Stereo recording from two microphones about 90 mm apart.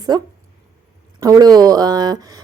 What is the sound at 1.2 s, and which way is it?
A woman's voice, 45° right (ahead or behind).